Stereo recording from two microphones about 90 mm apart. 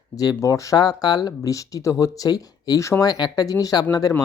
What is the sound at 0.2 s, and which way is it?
Speech, 40° left (ahead or behind).